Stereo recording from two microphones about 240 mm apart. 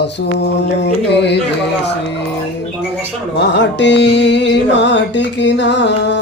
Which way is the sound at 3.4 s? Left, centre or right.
Left.